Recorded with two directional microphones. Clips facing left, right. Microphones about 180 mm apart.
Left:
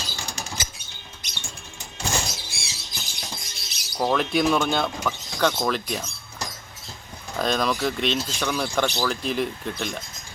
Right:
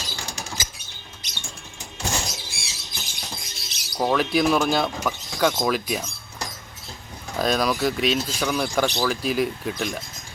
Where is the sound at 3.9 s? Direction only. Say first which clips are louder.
Right 1 dB; centre (ahead or behind).